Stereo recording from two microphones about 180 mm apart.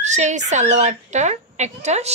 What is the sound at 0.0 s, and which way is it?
Fowl, 40° right (ahead or behind).